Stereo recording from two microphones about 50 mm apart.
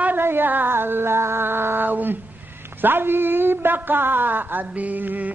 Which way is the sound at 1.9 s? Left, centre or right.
Right.